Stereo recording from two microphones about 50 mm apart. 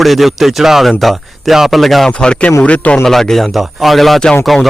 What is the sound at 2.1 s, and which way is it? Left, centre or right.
Speech, left.